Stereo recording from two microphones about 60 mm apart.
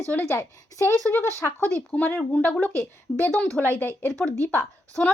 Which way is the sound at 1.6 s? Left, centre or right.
Left.